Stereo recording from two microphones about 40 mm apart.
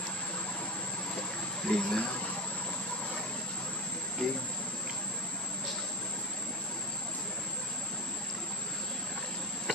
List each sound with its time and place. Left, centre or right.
1.7 s speech: left
4.2 s speech: centre